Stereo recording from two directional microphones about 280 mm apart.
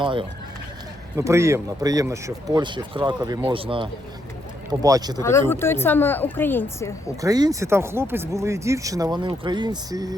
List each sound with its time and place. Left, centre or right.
0.0 s speech: centre
5.2 s speech: centre
7.2 s speech: centre